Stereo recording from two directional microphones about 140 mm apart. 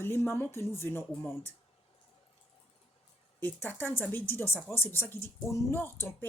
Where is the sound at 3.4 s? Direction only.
15° left (ahead or behind).